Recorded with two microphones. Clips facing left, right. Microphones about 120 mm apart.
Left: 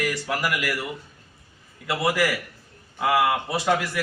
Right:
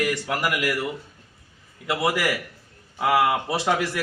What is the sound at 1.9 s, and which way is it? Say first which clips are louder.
A man's voice: even; 20° right (ahead or behind).